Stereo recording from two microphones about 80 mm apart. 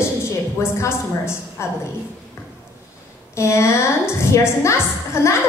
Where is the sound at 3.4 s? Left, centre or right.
Left.